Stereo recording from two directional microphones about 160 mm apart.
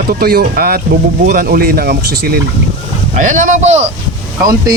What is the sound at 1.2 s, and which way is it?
Speech, 60° right (ahead or behind).